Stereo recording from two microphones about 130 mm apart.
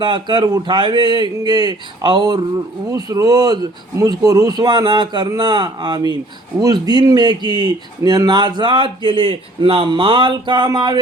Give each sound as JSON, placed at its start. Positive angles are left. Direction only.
{"t": 0.0, "sound": "speech", "side_deg": -35}